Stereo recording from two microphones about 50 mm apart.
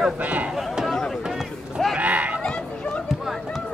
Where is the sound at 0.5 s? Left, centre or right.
Centre.